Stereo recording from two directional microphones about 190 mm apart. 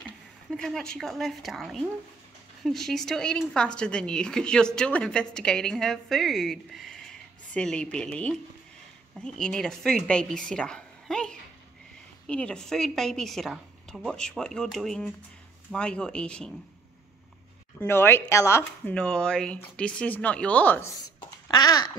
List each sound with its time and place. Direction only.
0.5 s speech: 5° left (ahead or behind)
17.7 s speech: 10° left (ahead or behind)
21.5 s babbling: 20° left (ahead or behind)